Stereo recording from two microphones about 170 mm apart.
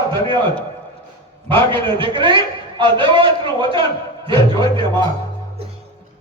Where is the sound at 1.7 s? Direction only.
30° right (ahead or behind).